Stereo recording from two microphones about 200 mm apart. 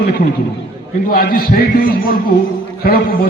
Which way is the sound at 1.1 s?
45° left (ahead or behind).